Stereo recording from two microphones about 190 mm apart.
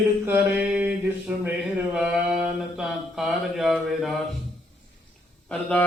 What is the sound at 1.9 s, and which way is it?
Mantra, 5° right (ahead or behind).